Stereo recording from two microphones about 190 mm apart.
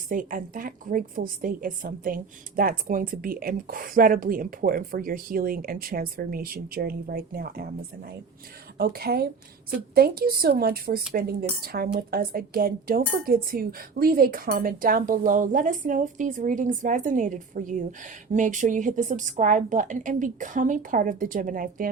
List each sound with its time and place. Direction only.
0.1 s a woman's voice: 45° right (ahead or behind)